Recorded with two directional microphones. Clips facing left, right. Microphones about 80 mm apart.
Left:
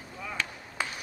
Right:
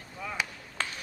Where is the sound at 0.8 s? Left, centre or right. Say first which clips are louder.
Left 1 dB; centre.